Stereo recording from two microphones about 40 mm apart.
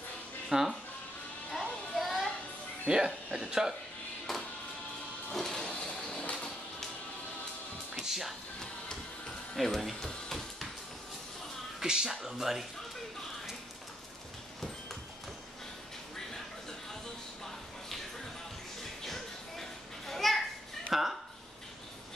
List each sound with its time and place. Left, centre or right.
0.5 s speech: centre
1.5 s music: centre
2.9 s speech: right
4.3 s music: centre
5.3 s a sound: centre
8.0 s music: centre
9.6 s music: centre
11.8 s speech: centre
19.0 s children playing: centre
20.9 s speech: centre